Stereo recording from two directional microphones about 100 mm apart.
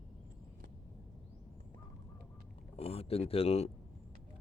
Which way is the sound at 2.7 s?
80° left.